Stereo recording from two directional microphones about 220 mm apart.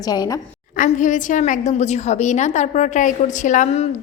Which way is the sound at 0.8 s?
35° left (ahead or behind).